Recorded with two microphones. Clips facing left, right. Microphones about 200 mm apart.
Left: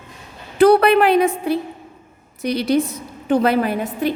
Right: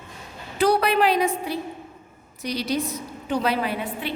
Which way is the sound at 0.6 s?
60° left (ahead or behind).